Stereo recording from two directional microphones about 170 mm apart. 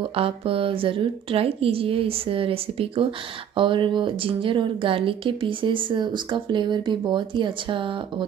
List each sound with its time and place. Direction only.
0.0 s a woman's voice: 35° right (ahead or behind)